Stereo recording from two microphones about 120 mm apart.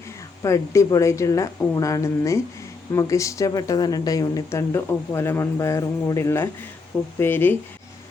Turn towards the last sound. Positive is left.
turn(degrees=15)  # may be behind; listen again after turning